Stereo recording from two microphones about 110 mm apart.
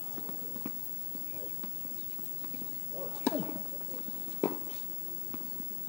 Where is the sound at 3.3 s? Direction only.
10° left (ahead or behind).